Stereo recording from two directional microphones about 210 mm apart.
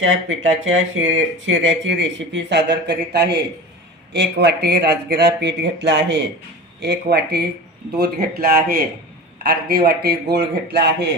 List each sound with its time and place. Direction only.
0.0 s speech: 65° right (ahead or behind); by 11.1 s 50° right (ahead or behind)